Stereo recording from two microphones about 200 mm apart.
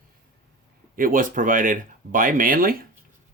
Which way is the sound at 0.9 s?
45° right (ahead or behind).